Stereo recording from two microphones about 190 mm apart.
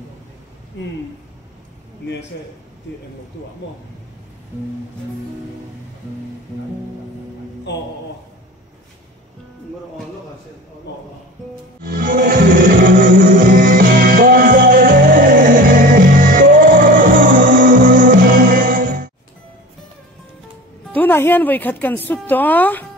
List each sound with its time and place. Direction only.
7.7 s a man's voice: 65° left (ahead or behind)
11.8 s music: 45° right (ahead or behind)
20.9 s speech: 10° left (ahead or behind)